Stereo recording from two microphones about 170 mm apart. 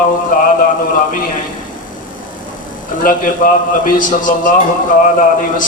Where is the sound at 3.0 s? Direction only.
55° left (ahead or behind).